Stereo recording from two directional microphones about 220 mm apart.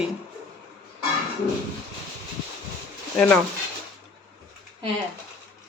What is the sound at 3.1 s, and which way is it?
Speech, 5° left (ahead or behind).